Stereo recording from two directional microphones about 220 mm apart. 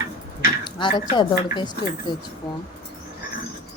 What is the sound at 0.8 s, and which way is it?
A woman's voice, 20° left (ahead or behind).